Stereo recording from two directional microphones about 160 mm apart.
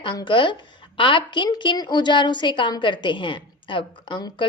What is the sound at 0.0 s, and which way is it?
A woman's voice, 30° left (ahead or behind).